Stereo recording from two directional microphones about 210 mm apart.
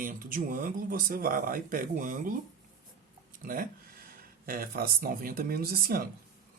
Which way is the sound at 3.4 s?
40° right (ahead or behind).